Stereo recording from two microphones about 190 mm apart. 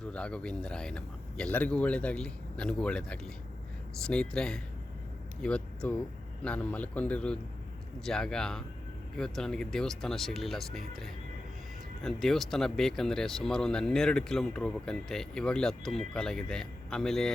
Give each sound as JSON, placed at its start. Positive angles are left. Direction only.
{"t": 0.0, "sound": "a man's voice", "side_deg": 5}